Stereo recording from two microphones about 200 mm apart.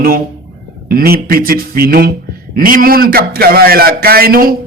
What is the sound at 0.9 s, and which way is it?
A man's voice, 50° right (ahead or behind).